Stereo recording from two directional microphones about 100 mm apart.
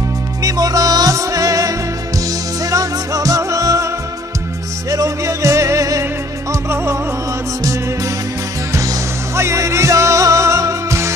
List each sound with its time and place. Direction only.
0.4 s music: 35° right (ahead or behind)
8.7 s music: 30° right (ahead or behind)